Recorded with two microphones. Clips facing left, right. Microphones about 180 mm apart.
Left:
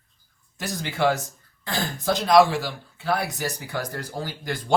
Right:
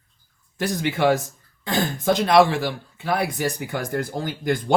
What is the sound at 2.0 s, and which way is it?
Speech, 55° right (ahead or behind).